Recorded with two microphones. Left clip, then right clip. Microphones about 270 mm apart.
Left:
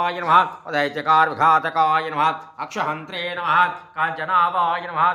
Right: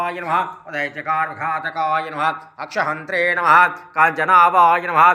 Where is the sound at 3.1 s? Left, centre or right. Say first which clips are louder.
Right 9 dB; right.